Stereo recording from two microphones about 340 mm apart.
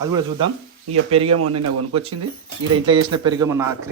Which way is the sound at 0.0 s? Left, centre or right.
Centre.